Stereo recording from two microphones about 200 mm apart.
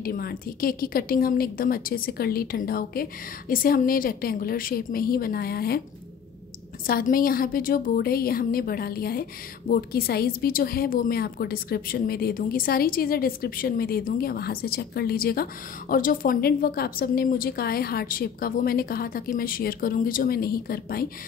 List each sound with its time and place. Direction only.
0.0 s a woman's voice: 50° left (ahead or behind)
6.9 s a woman's voice: 45° left (ahead or behind)